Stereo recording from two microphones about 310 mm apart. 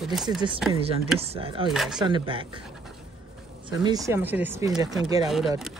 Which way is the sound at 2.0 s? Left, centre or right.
Centre.